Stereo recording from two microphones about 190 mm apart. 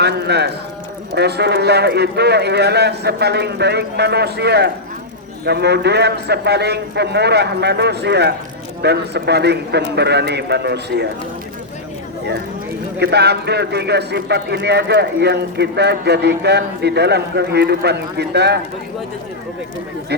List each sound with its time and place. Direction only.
0.0 s clip-clop: 60° right (ahead or behind)
1.1 s a man's voice: 60° right (ahead or behind)
13.0 s a man's voice: 60° right (ahead or behind)